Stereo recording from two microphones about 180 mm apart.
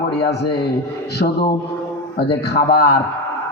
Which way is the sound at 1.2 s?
60° left (ahead or behind).